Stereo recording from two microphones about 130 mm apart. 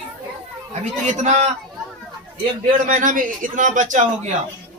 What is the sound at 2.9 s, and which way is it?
A man's voice, 90° right.